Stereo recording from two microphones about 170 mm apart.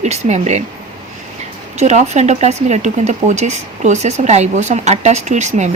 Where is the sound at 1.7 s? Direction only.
40° right (ahead or behind).